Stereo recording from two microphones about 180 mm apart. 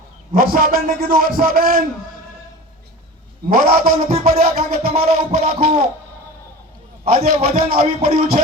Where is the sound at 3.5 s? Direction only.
55° right (ahead or behind).